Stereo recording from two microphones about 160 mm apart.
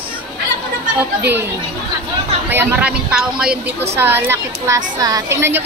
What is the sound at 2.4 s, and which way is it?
A woman's voice, 10° right (ahead or behind).